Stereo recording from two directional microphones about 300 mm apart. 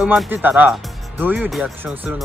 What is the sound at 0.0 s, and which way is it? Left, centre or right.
Speech, centre.